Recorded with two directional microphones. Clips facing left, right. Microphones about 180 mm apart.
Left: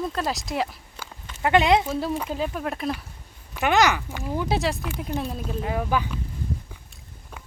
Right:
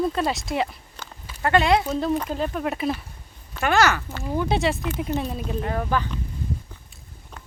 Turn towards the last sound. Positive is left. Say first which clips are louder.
# even
turn(degrees=10)  # may be behind; listen again after turning